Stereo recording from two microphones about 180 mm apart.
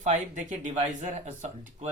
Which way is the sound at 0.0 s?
45° right (ahead or behind).